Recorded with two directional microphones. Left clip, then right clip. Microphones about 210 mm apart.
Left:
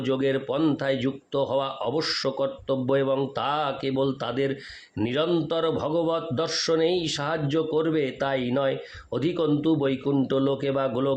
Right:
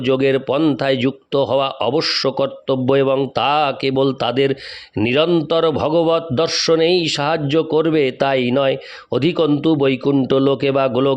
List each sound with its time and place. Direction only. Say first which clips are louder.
0.0 s a man's voice: right 9 dB; 40° right (ahead or behind)